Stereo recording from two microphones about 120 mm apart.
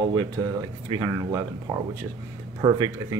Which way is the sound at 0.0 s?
40° right (ahead or behind).